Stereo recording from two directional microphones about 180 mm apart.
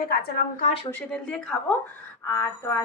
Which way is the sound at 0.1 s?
55° left (ahead or behind).